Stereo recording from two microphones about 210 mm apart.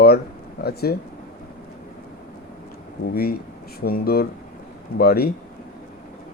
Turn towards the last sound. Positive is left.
turn(degrees=45)  # may be behind; listen again after turning